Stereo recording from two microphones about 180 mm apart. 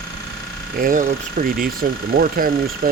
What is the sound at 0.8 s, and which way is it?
Speech, 50° right (ahead or behind).